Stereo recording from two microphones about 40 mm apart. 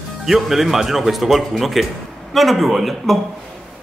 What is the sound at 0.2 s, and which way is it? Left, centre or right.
Speech, centre.